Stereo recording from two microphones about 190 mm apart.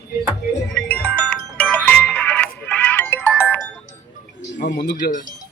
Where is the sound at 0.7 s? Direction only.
5° left (ahead or behind).